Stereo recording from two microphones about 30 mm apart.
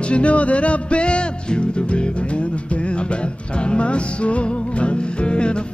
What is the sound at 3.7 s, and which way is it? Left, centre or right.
Music, left.